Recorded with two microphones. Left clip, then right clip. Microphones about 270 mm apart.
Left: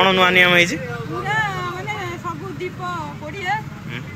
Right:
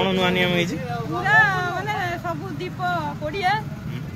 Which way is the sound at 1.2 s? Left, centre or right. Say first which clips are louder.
Right 5 dB; centre.